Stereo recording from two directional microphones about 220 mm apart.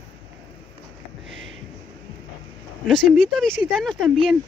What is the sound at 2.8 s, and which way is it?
Speech, 5° left (ahead or behind).